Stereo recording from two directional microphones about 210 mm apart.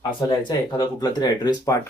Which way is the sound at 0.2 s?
20° left (ahead or behind).